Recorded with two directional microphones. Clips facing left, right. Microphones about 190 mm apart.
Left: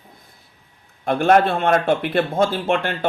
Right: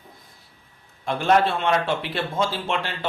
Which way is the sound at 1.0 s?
50° left (ahead or behind).